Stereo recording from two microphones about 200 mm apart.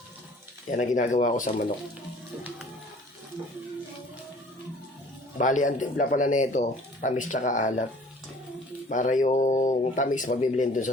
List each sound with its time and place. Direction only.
0.7 s speech: 40° left (ahead or behind)
5.4 s speech: 40° left (ahead or behind)
8.9 s speech: 40° left (ahead or behind)